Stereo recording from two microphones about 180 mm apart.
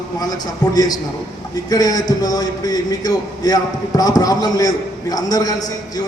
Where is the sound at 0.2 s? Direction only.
20° left (ahead or behind).